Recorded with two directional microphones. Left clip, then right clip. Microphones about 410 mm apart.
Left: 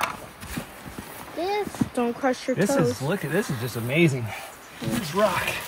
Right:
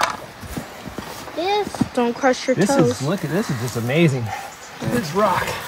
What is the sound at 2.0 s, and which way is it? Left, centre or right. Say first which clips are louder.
Speech: right 7 dB; right.